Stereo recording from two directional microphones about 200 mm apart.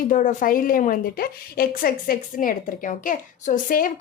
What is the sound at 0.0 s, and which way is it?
A woman's voice, 40° left (ahead or behind).